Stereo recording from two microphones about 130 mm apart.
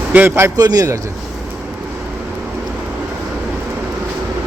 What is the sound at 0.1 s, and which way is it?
Speech, 15° right (ahead or behind).